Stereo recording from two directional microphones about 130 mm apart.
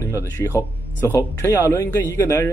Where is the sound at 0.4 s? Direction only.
15° left (ahead or behind).